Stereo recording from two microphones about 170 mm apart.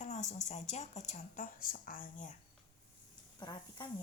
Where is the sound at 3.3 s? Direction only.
25° left (ahead or behind).